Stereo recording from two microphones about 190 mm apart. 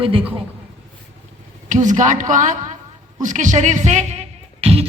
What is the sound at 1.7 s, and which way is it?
A woman's voice, 40° right (ahead or behind).